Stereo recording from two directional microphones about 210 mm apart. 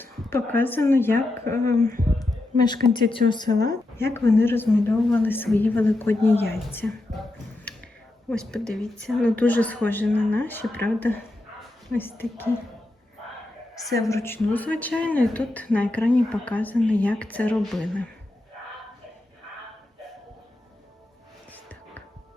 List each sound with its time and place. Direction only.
0.0 s speech: 10° left (ahead or behind)
2.9 s speech: 20° left (ahead or behind)
6.7 s music: 5° left (ahead or behind)
8.3 s speech: 5° left (ahead or behind)
14.1 s speech: 10° left (ahead or behind)
21.5 s a sound: 10° left (ahead or behind)